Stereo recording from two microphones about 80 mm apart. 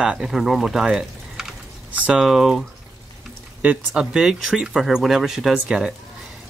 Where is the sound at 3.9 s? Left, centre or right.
Centre.